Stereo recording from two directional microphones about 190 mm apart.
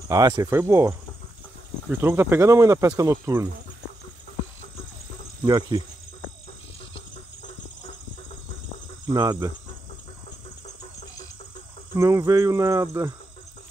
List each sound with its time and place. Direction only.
0.1 s speech: 20° right (ahead or behind)
5.4 s speech: 20° right (ahead or behind)
9.0 s speech: 20° right (ahead or behind)
12.0 s speech: 15° right (ahead or behind)